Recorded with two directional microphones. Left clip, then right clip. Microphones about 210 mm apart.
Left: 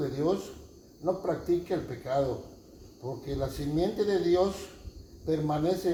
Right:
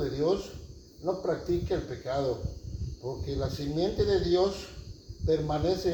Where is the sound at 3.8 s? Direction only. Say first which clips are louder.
Right 1 dB; 45° left (ahead or behind).